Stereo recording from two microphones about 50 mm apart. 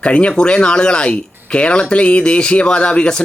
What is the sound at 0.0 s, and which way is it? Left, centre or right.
Speech, left.